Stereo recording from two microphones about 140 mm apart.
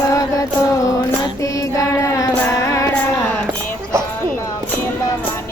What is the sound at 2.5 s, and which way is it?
Music, 20° left (ahead or behind).